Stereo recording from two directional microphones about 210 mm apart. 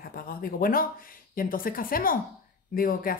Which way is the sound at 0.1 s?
45° left (ahead or behind).